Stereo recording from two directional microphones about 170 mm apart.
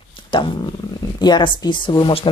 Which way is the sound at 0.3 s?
30° left (ahead or behind).